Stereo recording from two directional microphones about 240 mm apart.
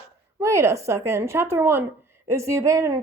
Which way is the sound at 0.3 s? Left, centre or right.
Centre.